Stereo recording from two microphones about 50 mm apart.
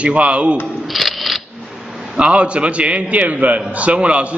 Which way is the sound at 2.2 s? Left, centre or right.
Right.